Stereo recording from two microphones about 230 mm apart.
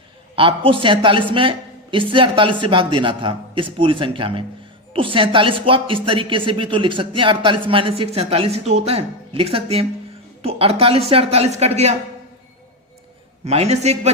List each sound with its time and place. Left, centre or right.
0.3 s a woman's voice: right
13.4 s a woman's voice: right